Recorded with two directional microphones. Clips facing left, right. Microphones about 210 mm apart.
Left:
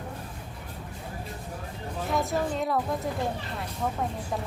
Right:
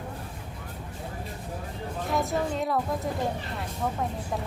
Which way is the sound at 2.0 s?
Centre (ahead or behind).